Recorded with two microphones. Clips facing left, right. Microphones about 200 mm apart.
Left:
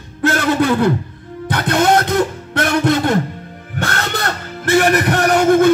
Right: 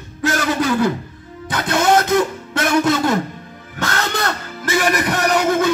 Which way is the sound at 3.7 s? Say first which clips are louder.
Even; 55° left (ahead or behind).